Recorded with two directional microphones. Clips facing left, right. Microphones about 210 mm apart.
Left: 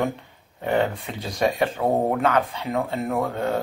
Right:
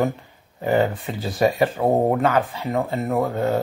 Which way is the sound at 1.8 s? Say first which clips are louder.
Right 3 dB; 15° right (ahead or behind).